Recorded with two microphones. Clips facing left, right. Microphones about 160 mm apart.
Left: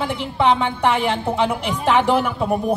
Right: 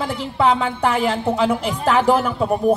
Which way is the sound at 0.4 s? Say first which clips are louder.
Even; 40° right (ahead or behind).